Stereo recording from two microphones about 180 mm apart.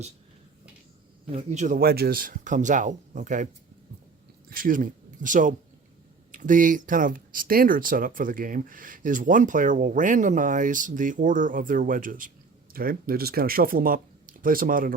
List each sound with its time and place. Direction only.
1.3 s speech: 40° right (ahead or behind)